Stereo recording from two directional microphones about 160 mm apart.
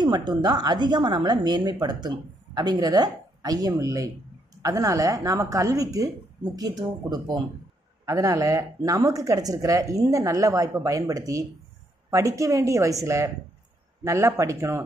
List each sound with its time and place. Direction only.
0.0 s a woman's voice: 25° right (ahead or behind)